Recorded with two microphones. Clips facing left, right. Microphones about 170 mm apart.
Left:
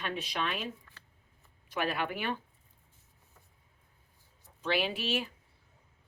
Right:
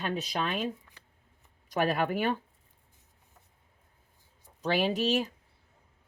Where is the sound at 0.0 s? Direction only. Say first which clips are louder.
Right 3 dB; 40° right (ahead or behind).